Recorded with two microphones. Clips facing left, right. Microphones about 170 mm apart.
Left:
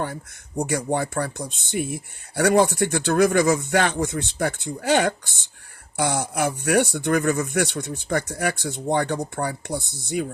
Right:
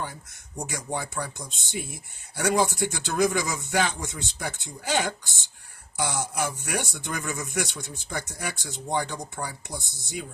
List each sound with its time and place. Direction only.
0.0 s speech: 60° left (ahead or behind)